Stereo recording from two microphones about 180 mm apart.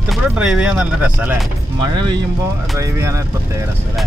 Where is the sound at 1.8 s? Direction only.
25° right (ahead or behind).